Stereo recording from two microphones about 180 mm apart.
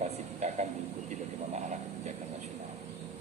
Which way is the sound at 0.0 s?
40° right (ahead or behind).